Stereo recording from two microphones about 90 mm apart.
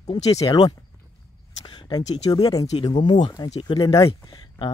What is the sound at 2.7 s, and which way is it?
Speech, 60° left (ahead or behind).